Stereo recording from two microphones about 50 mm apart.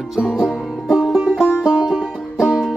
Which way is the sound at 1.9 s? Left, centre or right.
Right.